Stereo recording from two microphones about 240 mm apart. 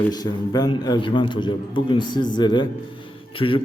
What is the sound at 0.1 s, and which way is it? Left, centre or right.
A man's voice, centre.